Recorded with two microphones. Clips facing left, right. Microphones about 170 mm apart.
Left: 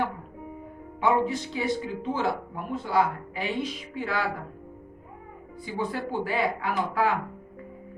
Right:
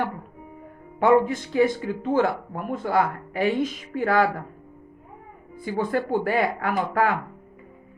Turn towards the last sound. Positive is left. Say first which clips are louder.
# right 3 dB
turn(degrees=-55)  # may be behind; listen again after turning